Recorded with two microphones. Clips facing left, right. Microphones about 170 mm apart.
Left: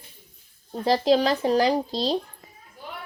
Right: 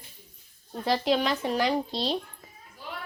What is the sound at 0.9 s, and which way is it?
Speech, 35° left (ahead or behind).